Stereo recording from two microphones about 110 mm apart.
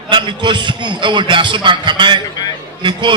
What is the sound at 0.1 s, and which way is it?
A man's voice, 45° right (ahead or behind).